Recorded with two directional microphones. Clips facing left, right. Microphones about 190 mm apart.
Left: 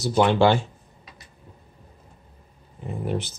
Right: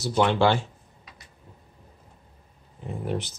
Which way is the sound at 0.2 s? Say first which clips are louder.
Left 3 dB; 15° left (ahead or behind).